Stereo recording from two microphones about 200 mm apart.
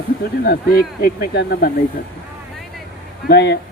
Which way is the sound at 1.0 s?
50° left (ahead or behind).